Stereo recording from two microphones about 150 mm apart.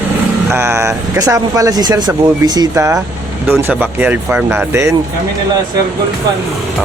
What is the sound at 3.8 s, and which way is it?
Speech, 10° right (ahead or behind).